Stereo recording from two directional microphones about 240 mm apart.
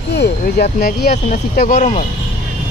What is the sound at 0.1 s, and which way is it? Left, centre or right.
Speech, left.